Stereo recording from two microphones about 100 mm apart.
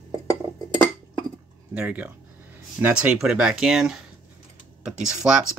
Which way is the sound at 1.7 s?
15° right (ahead or behind).